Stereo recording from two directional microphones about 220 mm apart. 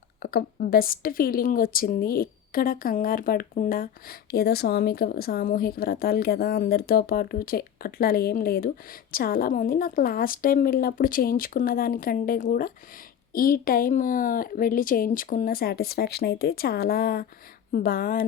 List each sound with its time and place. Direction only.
0.2 s a woman's voice: 45° left (ahead or behind)